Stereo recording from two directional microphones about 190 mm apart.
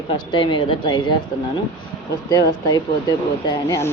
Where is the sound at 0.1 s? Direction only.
25° left (ahead or behind).